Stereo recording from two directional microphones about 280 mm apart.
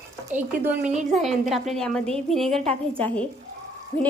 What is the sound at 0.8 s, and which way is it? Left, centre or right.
Speech, right.